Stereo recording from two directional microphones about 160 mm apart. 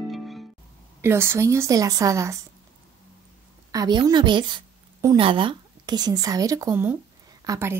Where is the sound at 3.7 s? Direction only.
25° right (ahead or behind).